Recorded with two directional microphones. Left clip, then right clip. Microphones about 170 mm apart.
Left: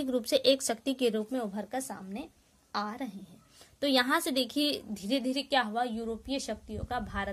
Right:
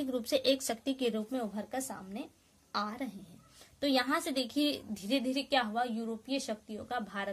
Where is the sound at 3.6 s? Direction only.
35° left (ahead or behind).